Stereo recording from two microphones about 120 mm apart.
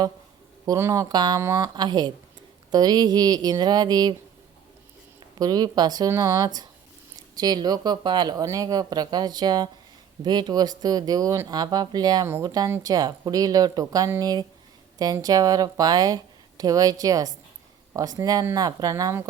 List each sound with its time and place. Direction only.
0.6 s speech: 25° right (ahead or behind)
5.4 s speech: 35° right (ahead or behind)